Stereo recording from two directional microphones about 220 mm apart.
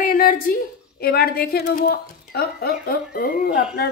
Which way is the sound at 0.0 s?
40° left (ahead or behind).